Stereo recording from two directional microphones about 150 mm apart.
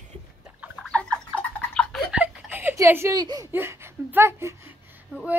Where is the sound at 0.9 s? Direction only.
10° left (ahead or behind).